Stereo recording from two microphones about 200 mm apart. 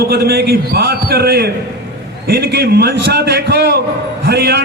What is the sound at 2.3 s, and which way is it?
A man's voice, 55° right (ahead or behind).